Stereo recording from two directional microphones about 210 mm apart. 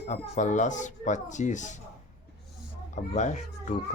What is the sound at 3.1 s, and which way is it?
Speech, 35° left (ahead or behind).